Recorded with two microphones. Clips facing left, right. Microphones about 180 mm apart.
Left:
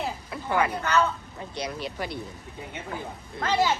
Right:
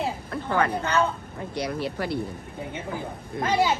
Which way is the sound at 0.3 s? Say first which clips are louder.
Even; 10° left (ahead or behind).